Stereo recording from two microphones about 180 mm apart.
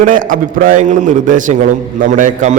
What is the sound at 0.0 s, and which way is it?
A man's voice, 50° right (ahead or behind).